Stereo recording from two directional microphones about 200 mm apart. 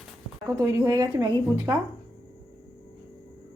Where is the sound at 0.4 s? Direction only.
15° right (ahead or behind).